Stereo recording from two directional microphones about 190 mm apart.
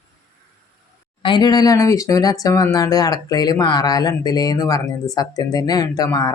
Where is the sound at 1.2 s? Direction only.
25° left (ahead or behind).